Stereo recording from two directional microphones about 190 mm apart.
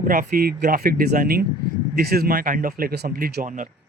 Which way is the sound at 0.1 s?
50° right (ahead or behind).